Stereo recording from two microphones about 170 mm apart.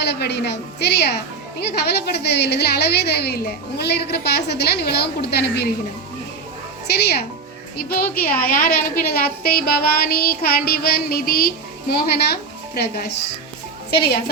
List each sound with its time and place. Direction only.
0.0 s speech: 80° left
6.8 s speech: 75° left (ahead or behind)
7.8 s child singing: 65° left (ahead or behind); by 13.3 s 80° left